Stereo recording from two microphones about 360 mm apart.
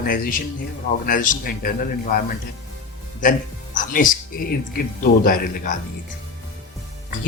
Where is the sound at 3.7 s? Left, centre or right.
Left.